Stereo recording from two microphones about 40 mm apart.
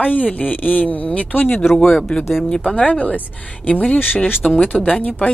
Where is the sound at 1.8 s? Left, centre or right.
Centre.